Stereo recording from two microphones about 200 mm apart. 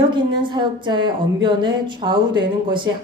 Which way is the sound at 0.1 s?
25° right (ahead or behind).